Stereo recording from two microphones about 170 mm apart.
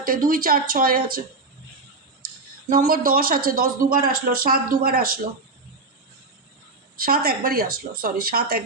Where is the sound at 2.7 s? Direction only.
55° right (ahead or behind).